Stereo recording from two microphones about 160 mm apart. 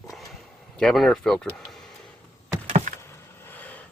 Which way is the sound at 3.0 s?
10° left (ahead or behind).